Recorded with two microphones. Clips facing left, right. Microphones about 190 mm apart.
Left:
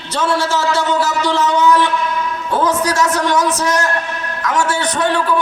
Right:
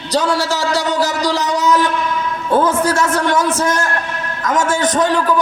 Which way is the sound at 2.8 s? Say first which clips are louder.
Even; 55° right (ahead or behind).